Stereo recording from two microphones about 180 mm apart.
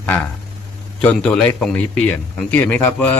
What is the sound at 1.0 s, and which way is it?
A man's voice, 5° left (ahead or behind).